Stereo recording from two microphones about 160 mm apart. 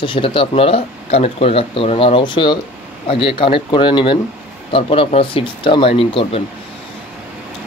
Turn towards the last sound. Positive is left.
turn(degrees=35)  # may be behind; listen again after turning